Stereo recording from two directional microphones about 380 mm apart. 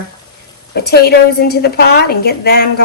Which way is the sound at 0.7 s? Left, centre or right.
Left.